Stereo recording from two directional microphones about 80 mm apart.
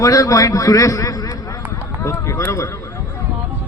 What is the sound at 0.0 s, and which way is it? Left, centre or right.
A man's voice, left.